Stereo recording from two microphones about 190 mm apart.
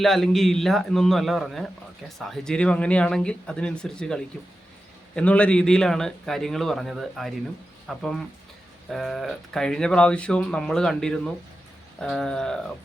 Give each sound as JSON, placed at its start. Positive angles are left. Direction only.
{"t": 0.0, "sound": "speech", "side_deg": 0}